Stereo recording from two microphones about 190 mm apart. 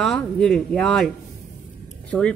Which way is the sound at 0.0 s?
5° left (ahead or behind).